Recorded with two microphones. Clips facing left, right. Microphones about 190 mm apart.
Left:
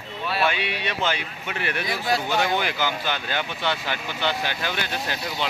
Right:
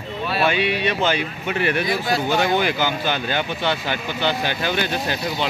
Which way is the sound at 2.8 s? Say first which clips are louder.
Right 4 dB; 30° right (ahead or behind).